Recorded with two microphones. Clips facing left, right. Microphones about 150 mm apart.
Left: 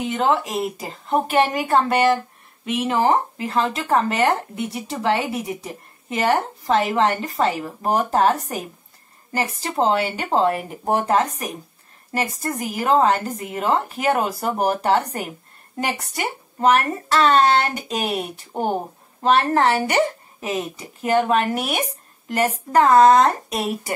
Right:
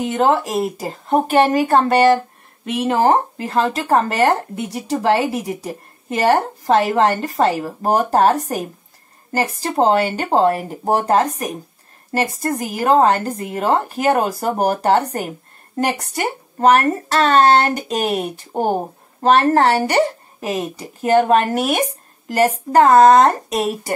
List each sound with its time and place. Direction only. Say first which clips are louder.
0.0 s speech: right 4 dB; 40° right (ahead or behind)